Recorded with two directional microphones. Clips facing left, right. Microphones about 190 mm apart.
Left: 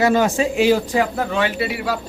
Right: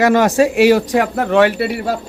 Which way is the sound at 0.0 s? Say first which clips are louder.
Right 4 dB; 75° right (ahead or behind).